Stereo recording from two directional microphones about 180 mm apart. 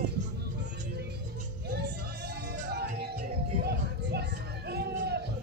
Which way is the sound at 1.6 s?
65° right (ahead or behind).